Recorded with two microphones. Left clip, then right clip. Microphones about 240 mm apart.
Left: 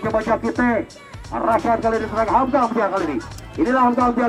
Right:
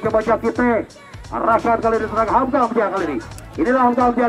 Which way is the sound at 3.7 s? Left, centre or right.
Left.